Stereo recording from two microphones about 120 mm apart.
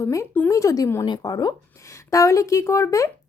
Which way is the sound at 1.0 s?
35° left (ahead or behind).